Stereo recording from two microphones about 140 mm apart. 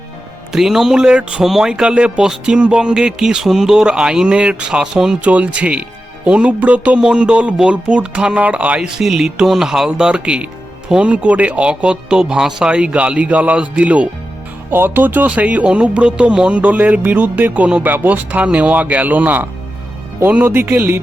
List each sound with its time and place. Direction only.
0.5 s speech: 5° right (ahead or behind)